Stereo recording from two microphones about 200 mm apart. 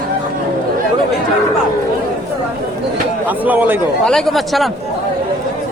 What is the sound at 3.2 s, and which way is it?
Speech, 10° right (ahead or behind).